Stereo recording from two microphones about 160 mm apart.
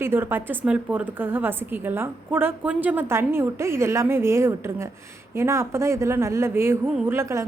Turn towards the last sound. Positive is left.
turn(degrees=-15)  # may be behind; listen again after turning